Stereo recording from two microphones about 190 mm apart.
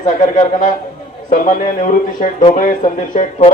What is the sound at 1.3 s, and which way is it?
Speech, 45° left (ahead or behind).